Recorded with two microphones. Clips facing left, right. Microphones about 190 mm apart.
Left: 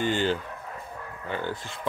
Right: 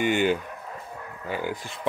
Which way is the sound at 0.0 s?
15° right (ahead or behind).